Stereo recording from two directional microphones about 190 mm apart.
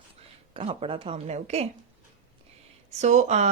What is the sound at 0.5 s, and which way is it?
Speech, 30° right (ahead or behind).